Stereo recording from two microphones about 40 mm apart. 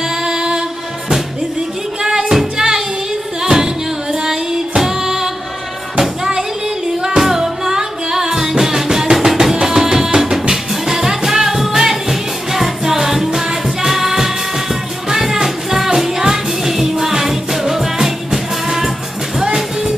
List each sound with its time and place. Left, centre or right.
0.2 s music: centre
2.0 s music: centre